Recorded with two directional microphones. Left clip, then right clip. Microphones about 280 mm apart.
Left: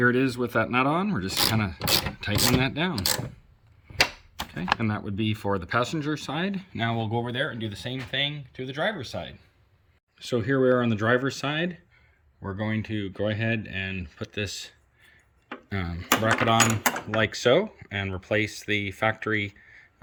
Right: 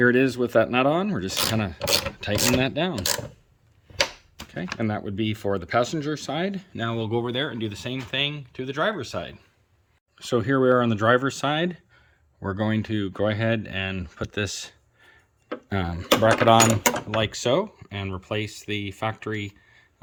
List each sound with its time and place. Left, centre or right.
0.0 s speech: centre
4.8 s speech: centre
12.4 s speech: centre